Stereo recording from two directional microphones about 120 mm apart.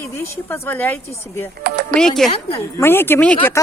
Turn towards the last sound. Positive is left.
turn(degrees=15)  # may be behind; listen again after turning